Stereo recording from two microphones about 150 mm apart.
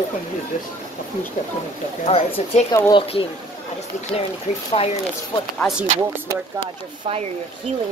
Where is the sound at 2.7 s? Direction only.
25° left (ahead or behind).